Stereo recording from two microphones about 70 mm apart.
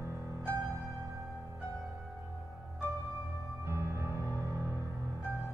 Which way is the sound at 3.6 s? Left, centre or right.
Right.